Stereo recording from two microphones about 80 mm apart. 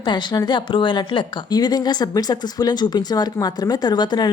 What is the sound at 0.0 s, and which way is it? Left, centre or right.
A woman's voice, left.